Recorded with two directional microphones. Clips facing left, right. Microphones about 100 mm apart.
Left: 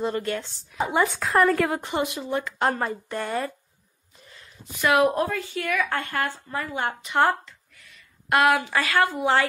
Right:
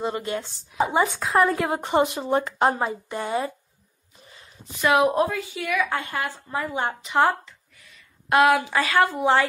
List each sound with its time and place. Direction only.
0.0 s a woman's voice: 10° right (ahead or behind)
1.1 s a woman's voice: centre (ahead or behind)
1.4 s a woman's voice: 15° right (ahead or behind)
1.8 s speech: 35° right (ahead or behind)
2.6 s a woman's voice: 15° right (ahead or behind)